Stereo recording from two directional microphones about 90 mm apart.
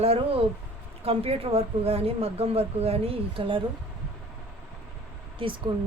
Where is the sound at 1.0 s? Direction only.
90° right.